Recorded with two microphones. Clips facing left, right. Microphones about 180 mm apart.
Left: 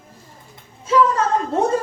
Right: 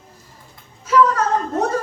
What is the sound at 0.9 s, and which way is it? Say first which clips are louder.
Speech: right 1 dB; 25° left (ahead or behind).